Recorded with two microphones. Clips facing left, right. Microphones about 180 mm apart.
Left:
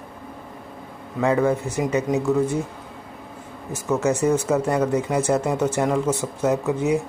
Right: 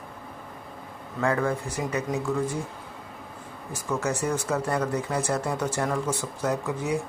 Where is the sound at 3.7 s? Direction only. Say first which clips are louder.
Left 7 dB; 25° left (ahead or behind).